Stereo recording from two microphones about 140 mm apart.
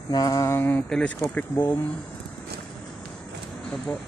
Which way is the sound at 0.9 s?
5° left (ahead or behind).